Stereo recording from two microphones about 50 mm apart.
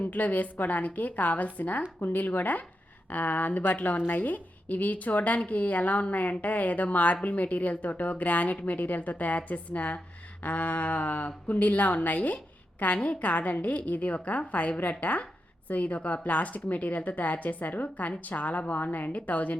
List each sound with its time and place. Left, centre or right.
0.0 s a woman's voice: left